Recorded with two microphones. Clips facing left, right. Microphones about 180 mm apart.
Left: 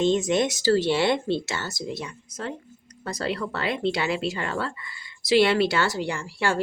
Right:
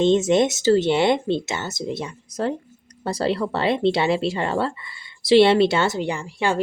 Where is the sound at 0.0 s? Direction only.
25° right (ahead or behind).